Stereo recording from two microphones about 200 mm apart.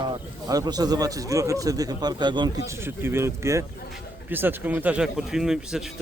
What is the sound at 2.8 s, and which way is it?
A man's voice, 10° right (ahead or behind).